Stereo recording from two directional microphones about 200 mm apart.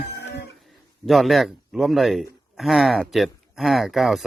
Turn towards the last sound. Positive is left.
turn(degrees=0)  # may be behind; listen again after turning